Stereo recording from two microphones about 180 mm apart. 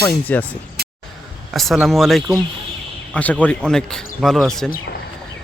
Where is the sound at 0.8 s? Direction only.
60° right (ahead or behind).